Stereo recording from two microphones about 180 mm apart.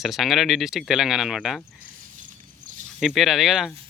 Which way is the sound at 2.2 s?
45° right (ahead or behind).